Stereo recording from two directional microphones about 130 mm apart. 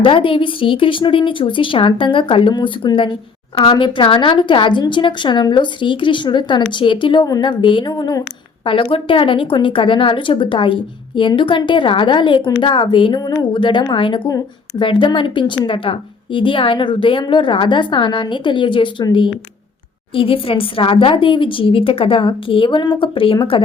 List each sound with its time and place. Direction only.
0.0 s a woman's voice: 40° left (ahead or behind)